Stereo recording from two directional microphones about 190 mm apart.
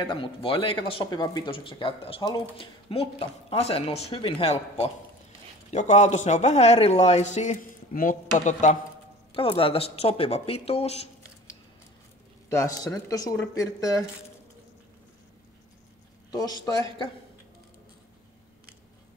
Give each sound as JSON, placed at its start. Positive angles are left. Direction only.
{"t": 0.0, "sound": "a man's voice", "side_deg": 25}
{"t": 12.4, "sound": "speech", "side_deg": 15}
{"t": 16.3, "sound": "speech", "side_deg": 20}